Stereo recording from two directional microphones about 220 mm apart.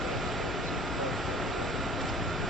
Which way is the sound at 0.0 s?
Centre (ahead or behind).